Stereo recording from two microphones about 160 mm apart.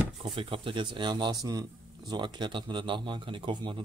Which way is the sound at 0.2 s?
35° right (ahead or behind).